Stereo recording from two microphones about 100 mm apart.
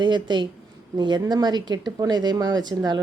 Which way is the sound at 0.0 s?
50° right (ahead or behind).